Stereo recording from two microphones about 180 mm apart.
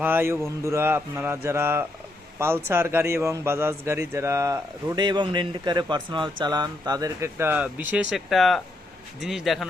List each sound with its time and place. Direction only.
0.0 s a man's voice: 10° right (ahead or behind)